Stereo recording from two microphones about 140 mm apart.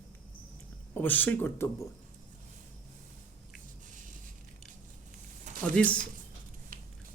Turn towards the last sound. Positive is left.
turn(degrees=-80)